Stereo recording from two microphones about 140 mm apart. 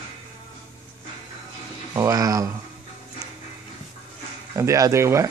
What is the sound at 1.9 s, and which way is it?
Speech, 25° right (ahead or behind).